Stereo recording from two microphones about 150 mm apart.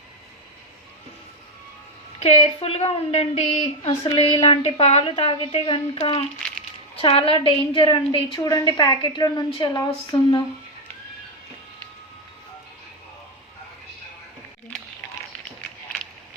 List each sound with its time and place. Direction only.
2.1 s a woman's voice: 40° left (ahead or behind)